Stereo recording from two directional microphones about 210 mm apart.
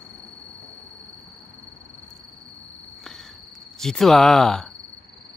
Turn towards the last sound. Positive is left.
turn(degrees=0)  # may be behind; listen again after turning